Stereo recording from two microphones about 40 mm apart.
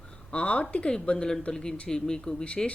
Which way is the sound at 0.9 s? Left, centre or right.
Centre.